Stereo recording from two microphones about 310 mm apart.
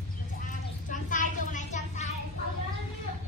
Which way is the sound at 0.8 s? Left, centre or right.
Left.